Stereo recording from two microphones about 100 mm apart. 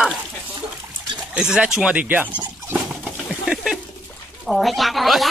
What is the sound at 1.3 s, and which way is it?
Speech, 10° right (ahead or behind).